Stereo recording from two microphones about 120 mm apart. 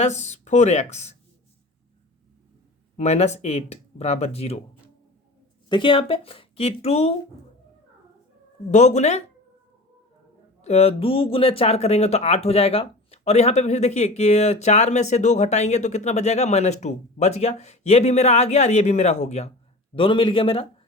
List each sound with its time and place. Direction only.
0.0 s speech: 70° left (ahead or behind)
3.0 s speech: 65° left (ahead or behind)
5.6 s speech: 45° left (ahead or behind); by 7.1 s 60° left (ahead or behind)
8.7 s speech: 70° left (ahead or behind)
10.6 s speech: 60° left (ahead or behind)
20.0 s speech: 45° left (ahead or behind)